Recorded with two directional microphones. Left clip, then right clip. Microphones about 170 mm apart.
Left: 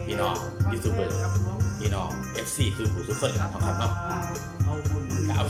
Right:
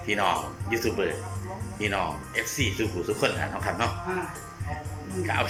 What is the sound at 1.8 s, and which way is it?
Speech, 15° left (ahead or behind).